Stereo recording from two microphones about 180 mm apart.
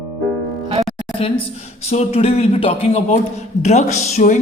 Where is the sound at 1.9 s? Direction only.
35° left (ahead or behind).